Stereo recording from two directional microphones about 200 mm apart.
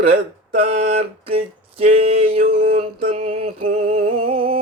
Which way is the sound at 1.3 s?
30° right (ahead or behind).